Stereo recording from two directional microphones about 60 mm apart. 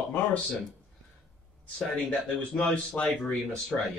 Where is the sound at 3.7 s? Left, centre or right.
Centre.